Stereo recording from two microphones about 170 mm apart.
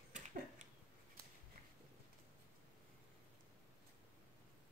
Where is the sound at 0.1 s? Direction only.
50° right (ahead or behind).